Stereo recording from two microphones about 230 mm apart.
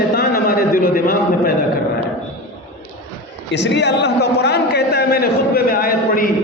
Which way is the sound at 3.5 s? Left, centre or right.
Left.